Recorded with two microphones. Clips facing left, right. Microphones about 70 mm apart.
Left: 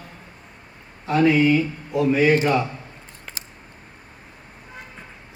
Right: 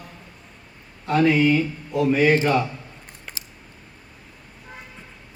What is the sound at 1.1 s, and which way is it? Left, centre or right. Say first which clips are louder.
A man's voice: left 1 dB; centre.